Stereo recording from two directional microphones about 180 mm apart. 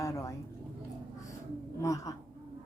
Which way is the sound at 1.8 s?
15° left (ahead or behind).